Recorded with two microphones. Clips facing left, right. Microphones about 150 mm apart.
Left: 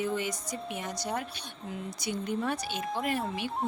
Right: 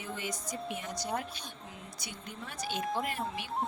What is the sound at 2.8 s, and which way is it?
Speech, centre (ahead or behind).